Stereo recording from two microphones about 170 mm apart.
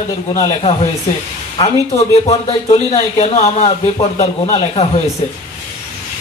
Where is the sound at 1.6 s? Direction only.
35° left (ahead or behind).